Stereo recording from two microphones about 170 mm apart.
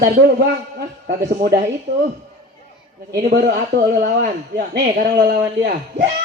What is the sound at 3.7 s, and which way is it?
Speech, 75° right (ahead or behind).